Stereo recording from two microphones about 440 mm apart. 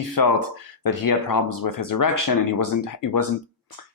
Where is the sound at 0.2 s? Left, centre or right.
Left.